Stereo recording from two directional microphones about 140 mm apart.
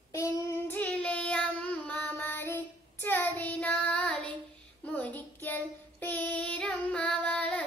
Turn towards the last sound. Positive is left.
turn(degrees=10)  # may be behind; listen again after turning